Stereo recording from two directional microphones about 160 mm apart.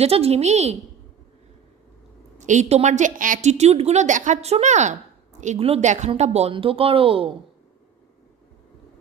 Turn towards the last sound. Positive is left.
turn(degrees=-35)  # may be behind; listen again after turning